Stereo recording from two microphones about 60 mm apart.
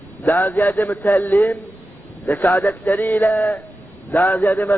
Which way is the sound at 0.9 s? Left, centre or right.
Left.